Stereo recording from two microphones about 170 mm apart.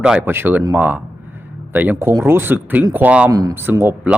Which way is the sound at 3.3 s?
20° right (ahead or behind).